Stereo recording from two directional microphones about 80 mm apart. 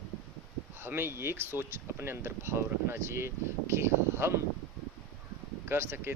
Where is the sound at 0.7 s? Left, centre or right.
Right.